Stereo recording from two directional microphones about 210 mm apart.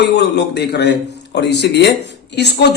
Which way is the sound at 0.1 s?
55° left (ahead or behind).